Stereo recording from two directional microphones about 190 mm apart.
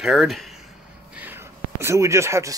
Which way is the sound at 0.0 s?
Centre (ahead or behind).